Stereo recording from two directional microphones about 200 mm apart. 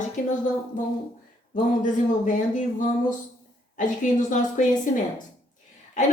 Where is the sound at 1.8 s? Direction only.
40° left (ahead or behind).